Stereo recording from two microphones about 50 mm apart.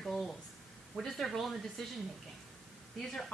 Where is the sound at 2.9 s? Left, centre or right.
Centre.